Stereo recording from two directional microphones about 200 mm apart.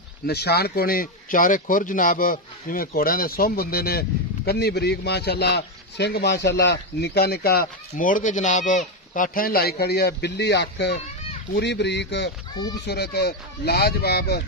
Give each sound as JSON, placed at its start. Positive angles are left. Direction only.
{"t": 0.3, "sound": "a man's voice", "side_deg": 55}